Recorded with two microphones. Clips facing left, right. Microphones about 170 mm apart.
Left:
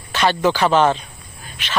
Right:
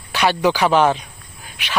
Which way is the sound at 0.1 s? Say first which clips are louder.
Even; 10° right (ahead or behind).